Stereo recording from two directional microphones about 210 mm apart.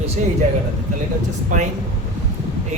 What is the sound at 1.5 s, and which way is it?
Speech, 40° right (ahead or behind).